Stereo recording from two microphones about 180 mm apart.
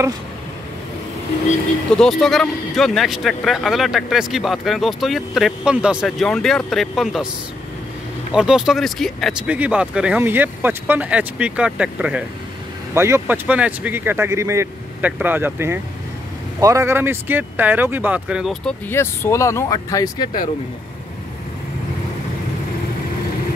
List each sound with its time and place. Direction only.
2.0 s speech: centre (ahead or behind)
8.3 s speech: 5° right (ahead or behind)
18.9 s speech: 15° left (ahead or behind)